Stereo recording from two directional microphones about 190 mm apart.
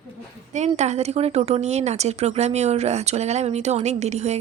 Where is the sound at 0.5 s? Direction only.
35° right (ahead or behind).